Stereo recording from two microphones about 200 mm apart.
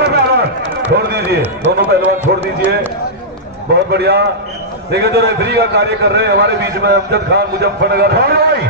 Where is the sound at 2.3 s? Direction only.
55° right (ahead or behind).